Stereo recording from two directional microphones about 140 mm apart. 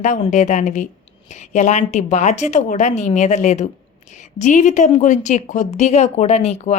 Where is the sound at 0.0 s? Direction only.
60° left (ahead or behind).